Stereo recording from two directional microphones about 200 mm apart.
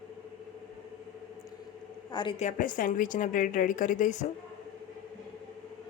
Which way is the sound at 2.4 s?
40° left (ahead or behind).